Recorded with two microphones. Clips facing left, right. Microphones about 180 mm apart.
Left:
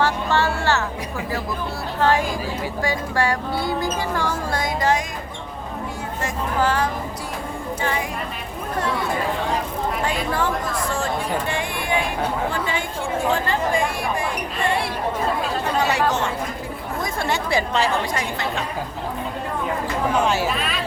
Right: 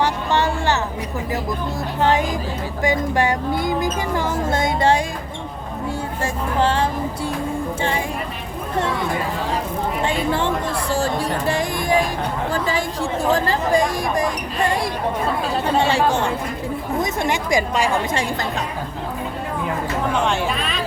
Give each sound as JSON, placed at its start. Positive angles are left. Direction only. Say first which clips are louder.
{"t": 0.0, "sound": "a sound", "louder": "right 1 dB", "side_deg": -20}
{"t": 2.0, "sound": "speech", "louder": "right 1 dB", "side_deg": -20}
{"t": 6.6, "sound": "speech", "louder": "right 2 dB", "side_deg": -30}
{"t": 10.0, "sound": "speech", "louder": "right 4 dB", "side_deg": -25}
{"t": 13.3, "sound": "speech", "louder": "right 6 dB", "side_deg": -40}
{"t": 15.6, "sound": "speech", "louder": "right 3 dB", "side_deg": -30}
{"t": 17.0, "sound": "a woman's voice", "louder": "right 1 dB", "side_deg": -20}
{"t": 18.1, "sound": "speech", "louder": "right 2 dB", "side_deg": -30}
{"t": 20.1, "sound": "speech", "louder": "left 1 dB", "side_deg": 5}